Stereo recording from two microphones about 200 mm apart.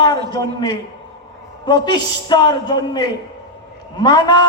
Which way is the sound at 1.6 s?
20° left (ahead or behind).